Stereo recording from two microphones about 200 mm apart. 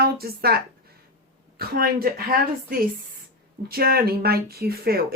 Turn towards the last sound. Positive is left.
turn(degrees=-50)  # may be behind; listen again after turning